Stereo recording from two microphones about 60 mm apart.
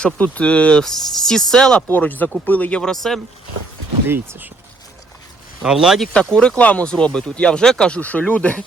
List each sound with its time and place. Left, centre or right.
0.0 s speech: left
1.9 s speech: left
2.8 s speech: centre
4.0 s speech: right
5.6 s speech: centre
6.6 s speech: left